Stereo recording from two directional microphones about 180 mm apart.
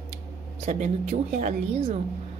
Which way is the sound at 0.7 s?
40° right (ahead or behind).